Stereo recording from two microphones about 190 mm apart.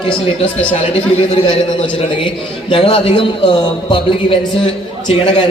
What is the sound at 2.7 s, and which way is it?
A woman's voice, 30° left (ahead or behind).